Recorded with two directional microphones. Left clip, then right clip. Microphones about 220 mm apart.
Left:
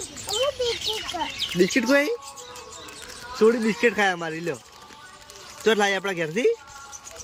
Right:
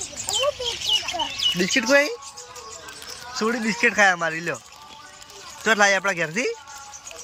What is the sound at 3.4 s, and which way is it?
Speech, 5° left (ahead or behind).